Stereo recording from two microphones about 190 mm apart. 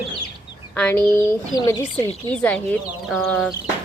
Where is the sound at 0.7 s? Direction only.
5° left (ahead or behind).